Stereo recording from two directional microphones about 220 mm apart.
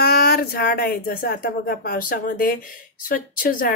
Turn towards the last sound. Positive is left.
turn(degrees=40)  # may be behind; listen again after turning